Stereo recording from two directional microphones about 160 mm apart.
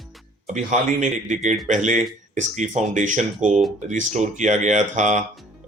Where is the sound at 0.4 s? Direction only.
50° right (ahead or behind).